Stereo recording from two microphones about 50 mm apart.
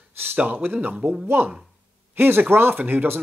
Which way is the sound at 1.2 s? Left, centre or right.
Right.